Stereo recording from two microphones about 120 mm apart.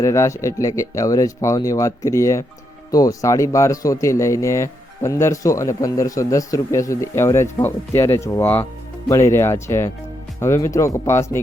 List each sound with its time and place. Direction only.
0.0 s speech: 25° left (ahead or behind)